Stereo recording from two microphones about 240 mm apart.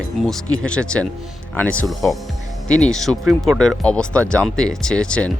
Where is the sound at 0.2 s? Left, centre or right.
Centre.